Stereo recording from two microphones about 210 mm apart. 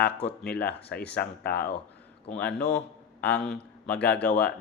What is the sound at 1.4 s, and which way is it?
A man's voice, 50° left (ahead or behind).